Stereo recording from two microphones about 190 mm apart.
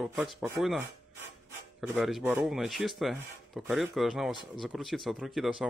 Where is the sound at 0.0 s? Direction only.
Centre (ahead or behind).